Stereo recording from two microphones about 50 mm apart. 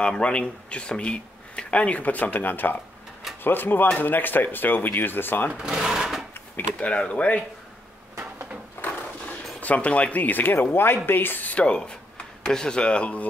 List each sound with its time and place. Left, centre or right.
0.0 s speech: left
5.6 s speech: centre
6.8 s speech: left
8.2 s drawer open or close: right
9.6 s speech: left
11.6 s speech: left